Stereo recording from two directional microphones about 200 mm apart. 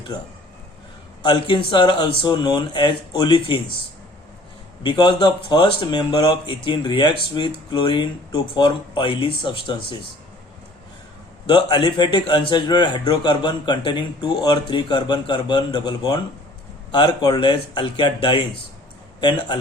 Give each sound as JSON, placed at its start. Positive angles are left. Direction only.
{"t": 1.2, "sound": "speech", "side_deg": 25}
{"t": 4.8, "sound": "speech", "side_deg": 20}
{"t": 11.4, "sound": "speech", "side_deg": 20}